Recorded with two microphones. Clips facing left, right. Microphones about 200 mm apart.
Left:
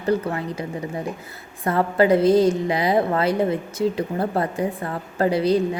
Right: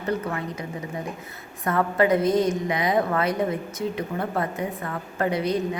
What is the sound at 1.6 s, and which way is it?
A woman's voice, 30° left (ahead or behind).